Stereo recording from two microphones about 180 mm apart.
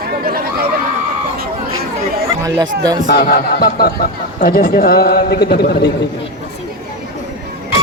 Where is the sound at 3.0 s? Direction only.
55° left (ahead or behind).